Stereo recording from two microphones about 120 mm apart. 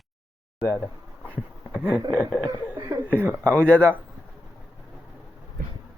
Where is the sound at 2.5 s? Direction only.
30° right (ahead or behind).